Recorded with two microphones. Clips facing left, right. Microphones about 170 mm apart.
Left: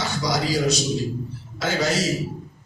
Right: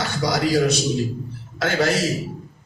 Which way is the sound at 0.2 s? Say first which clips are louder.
Right 5 dB; 55° right (ahead or behind).